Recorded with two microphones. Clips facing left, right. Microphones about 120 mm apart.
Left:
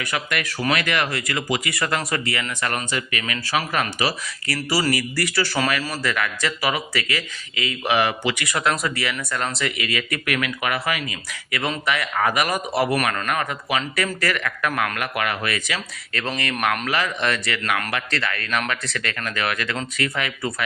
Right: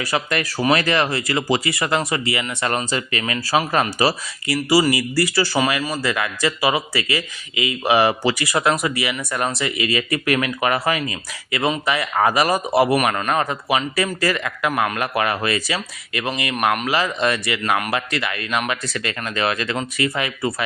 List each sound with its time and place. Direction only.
0.0 s speech: 35° right (ahead or behind)
4.4 s speech: 20° right (ahead or behind)
5.1 s speech: 30° right (ahead or behind)
5.5 s speech: 20° right (ahead or behind)
14.9 s speech: 30° right (ahead or behind)
16.1 s speech: 15° right (ahead or behind)